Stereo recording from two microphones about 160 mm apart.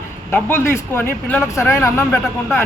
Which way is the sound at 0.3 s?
10° left (ahead or behind).